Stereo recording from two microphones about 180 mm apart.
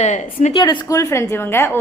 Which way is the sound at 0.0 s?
40° left (ahead or behind).